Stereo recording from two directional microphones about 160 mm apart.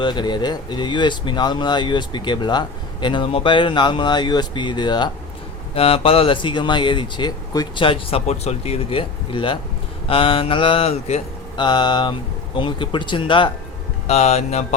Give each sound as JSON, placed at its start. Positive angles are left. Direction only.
{"t": 0.0, "sound": "speech", "side_deg": 30}
{"t": 14.1, "sound": "speech", "side_deg": 45}